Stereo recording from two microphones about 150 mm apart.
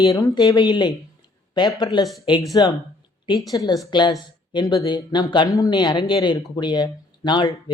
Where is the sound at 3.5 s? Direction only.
25° left (ahead or behind).